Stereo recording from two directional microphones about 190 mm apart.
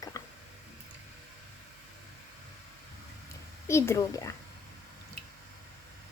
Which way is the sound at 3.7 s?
15° left (ahead or behind).